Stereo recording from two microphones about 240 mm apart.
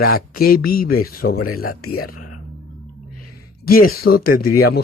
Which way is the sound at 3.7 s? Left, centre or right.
Left.